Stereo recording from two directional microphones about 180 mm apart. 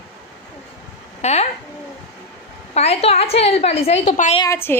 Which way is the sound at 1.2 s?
40° left (ahead or behind).